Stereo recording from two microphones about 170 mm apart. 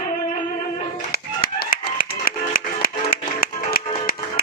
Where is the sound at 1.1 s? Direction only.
60° left (ahead or behind).